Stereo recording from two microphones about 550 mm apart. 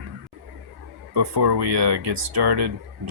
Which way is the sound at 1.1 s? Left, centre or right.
Right.